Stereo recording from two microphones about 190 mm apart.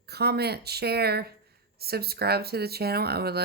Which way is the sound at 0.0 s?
55° right (ahead or behind).